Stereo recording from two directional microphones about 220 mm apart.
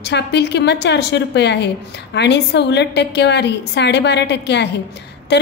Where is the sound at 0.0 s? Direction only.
50° left (ahead or behind).